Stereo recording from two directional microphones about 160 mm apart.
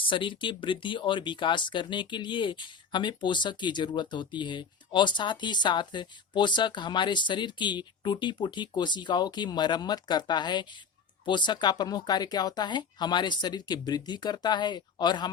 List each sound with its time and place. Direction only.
0.1 s speech: 30° left (ahead or behind)